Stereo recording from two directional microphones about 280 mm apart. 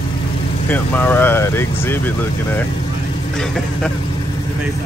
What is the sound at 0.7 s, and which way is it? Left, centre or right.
Speech, centre.